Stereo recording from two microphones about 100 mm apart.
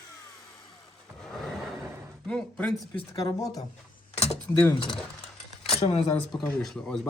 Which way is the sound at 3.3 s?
35° left (ahead or behind).